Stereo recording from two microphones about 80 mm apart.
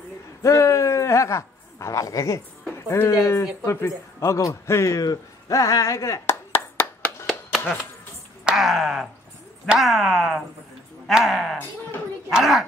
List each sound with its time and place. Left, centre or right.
0.4 s a man's voice: left
5.0 s clapping: left
7.2 s a sound: centre
8.5 s speech: centre